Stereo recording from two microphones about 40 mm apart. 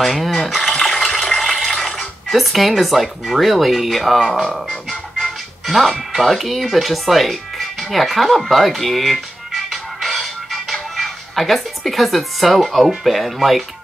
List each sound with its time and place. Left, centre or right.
0.0 s speech: centre
0.7 s a sound: centre
1.2 s water: centre
1.5 s speech: centre